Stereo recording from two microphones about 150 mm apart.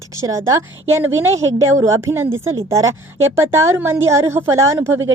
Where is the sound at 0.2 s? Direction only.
20° right (ahead or behind).